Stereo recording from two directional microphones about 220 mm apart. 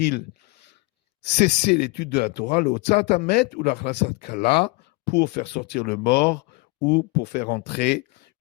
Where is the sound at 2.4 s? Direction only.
30° left (ahead or behind).